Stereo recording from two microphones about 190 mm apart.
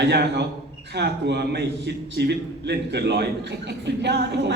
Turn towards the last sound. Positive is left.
turn(degrees=-65)  # may be behind; listen again after turning